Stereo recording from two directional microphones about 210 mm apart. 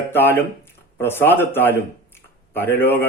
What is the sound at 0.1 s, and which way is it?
Speech, 10° left (ahead or behind).